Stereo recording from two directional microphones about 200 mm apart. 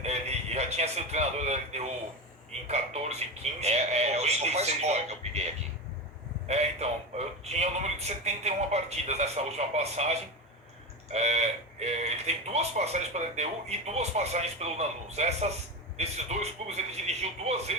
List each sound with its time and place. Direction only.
0.0 s a man's voice: 30° right (ahead or behind)
6.5 s speech: 35° right (ahead or behind)